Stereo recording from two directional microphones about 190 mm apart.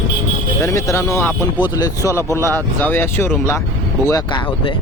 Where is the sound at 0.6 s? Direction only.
15° left (ahead or behind).